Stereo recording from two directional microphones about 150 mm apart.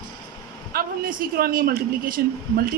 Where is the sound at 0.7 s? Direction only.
80° right.